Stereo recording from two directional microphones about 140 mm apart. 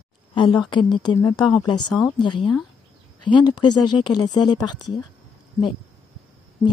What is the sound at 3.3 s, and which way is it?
Speech, 35° left (ahead or behind).